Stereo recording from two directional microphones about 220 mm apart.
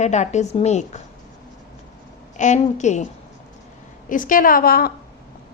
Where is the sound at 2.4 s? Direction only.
35° left (ahead or behind).